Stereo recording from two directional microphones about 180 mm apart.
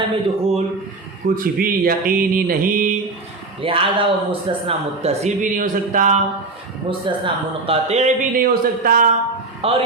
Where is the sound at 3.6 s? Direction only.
30° right (ahead or behind).